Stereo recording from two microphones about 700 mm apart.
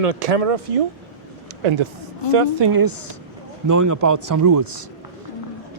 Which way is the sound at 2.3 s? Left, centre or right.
Right.